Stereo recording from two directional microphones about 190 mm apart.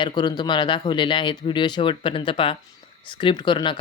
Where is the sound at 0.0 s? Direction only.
25° left (ahead or behind).